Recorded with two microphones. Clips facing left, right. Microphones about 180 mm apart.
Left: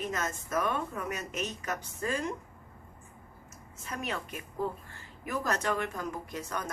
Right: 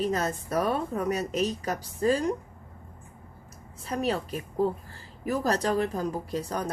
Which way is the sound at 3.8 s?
35° right (ahead or behind).